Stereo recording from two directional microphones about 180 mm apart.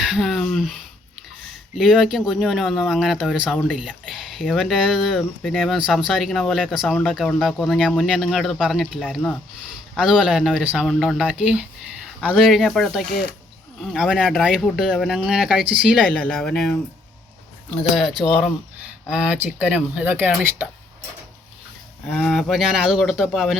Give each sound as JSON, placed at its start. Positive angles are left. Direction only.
{"t": 0.0, "sound": "a sound", "side_deg": 0}
{"t": 1.7, "sound": "speech", "side_deg": -5}
{"t": 19.1, "sound": "speech", "side_deg": -5}
{"t": 22.2, "sound": "speech", "side_deg": 0}